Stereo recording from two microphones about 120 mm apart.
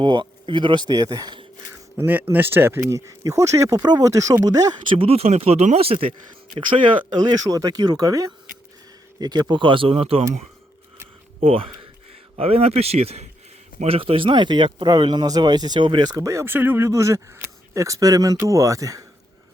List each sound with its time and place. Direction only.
0.0 s speech: 40° right (ahead or behind)
2.0 s speech: 15° right (ahead or behind)
4.9 s speech: 55° right (ahead or behind)
7.2 s speech: 35° right (ahead or behind); by 10.2 s 55° right (ahead or behind)
11.3 s speech: 50° right (ahead or behind); by 19.0 s 30° right (ahead or behind)